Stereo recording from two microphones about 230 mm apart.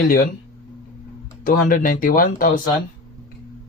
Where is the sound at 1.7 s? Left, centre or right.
Left.